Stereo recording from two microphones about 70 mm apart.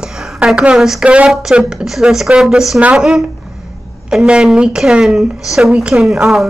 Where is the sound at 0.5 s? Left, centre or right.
Centre.